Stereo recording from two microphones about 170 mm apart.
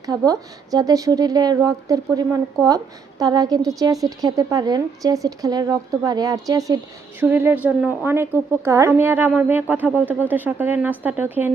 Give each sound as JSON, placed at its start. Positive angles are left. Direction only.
{"t": 0.0, "sound": "a woman's voice", "side_deg": -20}